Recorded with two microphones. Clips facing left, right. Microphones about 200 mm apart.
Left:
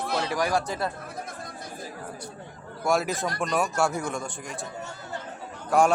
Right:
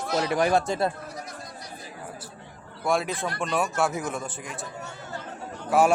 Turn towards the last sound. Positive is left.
turn(degrees=-5)  # may be behind; listen again after turning